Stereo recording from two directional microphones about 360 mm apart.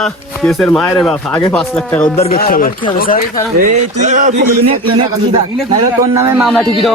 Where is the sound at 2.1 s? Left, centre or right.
Centre.